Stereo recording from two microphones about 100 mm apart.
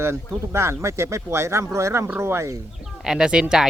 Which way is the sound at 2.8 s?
5° right (ahead or behind).